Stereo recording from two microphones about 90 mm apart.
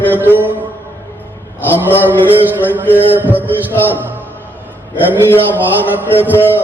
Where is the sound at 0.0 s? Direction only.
20° left (ahead or behind).